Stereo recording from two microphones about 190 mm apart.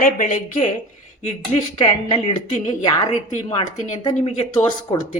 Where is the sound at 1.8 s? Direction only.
25° left (ahead or behind).